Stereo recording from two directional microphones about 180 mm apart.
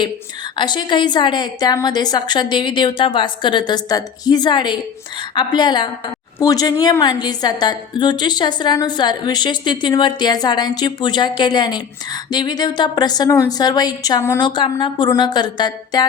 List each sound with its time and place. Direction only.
0.5 s a woman's voice: 25° left (ahead or behind)